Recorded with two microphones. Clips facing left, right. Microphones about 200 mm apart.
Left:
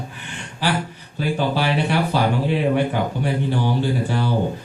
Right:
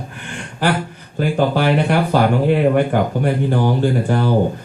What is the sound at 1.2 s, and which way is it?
Speech, 50° right (ahead or behind).